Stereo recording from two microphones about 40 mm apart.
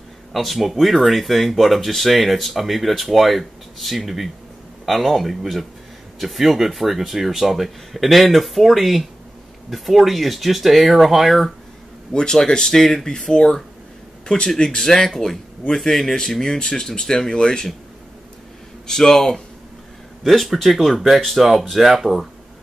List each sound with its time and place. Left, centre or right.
0.3 s speech: centre
12.1 s speech: centre
14.8 s speech: centre
18.9 s speech: centre
20.2 s speech: centre